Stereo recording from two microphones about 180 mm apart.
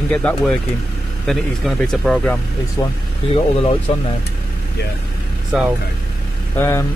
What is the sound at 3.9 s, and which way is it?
Speech, 35° left (ahead or behind).